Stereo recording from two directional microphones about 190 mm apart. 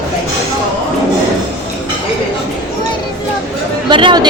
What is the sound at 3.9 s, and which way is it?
Speech, 25° right (ahead or behind).